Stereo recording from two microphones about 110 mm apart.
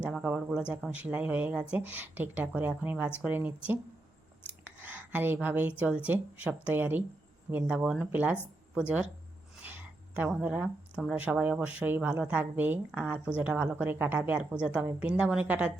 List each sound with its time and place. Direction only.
0.0 s a woman's voice: 10° right (ahead or behind)
4.6 s a woman's voice: 15° right (ahead or behind)
9.6 s a sound: 20° right (ahead or behind)
11.1 s a woman's voice: 10° right (ahead or behind)